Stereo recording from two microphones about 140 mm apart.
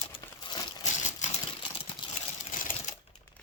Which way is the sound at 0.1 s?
35° left (ahead or behind).